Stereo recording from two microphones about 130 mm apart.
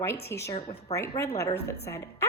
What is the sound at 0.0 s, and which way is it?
A woman's voice, 20° left (ahead or behind).